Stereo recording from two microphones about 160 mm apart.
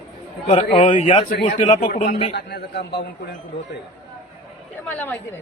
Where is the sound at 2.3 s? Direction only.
90° left.